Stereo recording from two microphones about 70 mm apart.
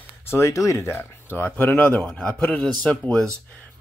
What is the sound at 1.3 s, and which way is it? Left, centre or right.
Speech, left.